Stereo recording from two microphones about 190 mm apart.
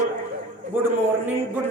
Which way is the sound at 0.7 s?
10° right (ahead or behind).